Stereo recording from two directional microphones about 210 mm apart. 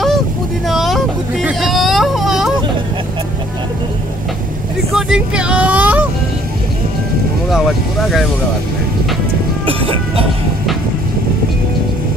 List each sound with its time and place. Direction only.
0.7 s a sound: centre (ahead or behind)
4.9 s vehicle: 5° right (ahead or behind)
7.4 s speech: centre (ahead or behind)
9.7 s music: 25° right (ahead or behind)